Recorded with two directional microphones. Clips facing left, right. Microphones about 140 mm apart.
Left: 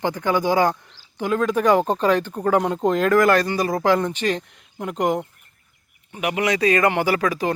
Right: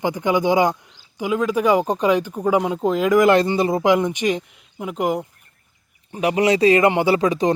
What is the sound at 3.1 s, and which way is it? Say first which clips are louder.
Speech: right 2 dB; 20° right (ahead or behind).